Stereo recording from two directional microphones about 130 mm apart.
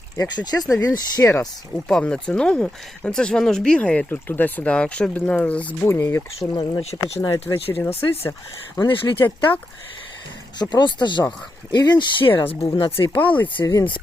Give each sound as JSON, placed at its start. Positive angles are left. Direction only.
{"t": 0.2, "sound": "speech", "side_deg": 30}
{"t": 1.9, "sound": "speech", "side_deg": 5}
{"t": 6.5, "sound": "speech", "side_deg": 40}
{"t": 7.8, "sound": "speech", "side_deg": 20}
{"t": 8.8, "sound": "speech", "side_deg": 40}
{"t": 9.2, "sound": "speech", "side_deg": 15}
{"t": 10.6, "sound": "speech", "side_deg": 35}
{"t": 13.1, "sound": "speech", "side_deg": 15}
{"t": 13.6, "sound": "speech", "side_deg": 25}